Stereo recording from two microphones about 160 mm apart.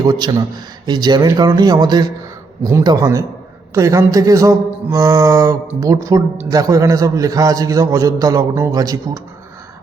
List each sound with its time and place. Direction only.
0.0 s a man's voice: 25° right (ahead or behind)